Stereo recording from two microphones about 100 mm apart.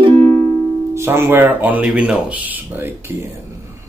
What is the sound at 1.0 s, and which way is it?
Speech, 25° right (ahead or behind).